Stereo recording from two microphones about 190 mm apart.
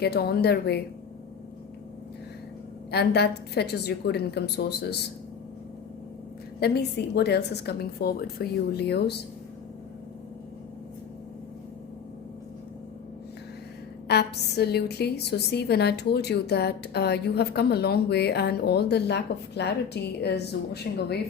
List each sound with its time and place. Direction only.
0.0 s a woman's voice: 55° left (ahead or behind)
2.9 s a woman's voice: 60° left (ahead or behind)
6.6 s a woman's voice: 60° left (ahead or behind)
14.1 s a woman's voice: 60° left (ahead or behind)